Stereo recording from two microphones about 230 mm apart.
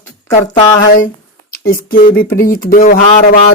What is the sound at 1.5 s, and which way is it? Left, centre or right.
Speech, left.